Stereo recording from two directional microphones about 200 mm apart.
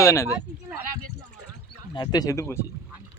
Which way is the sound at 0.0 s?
15° left (ahead or behind).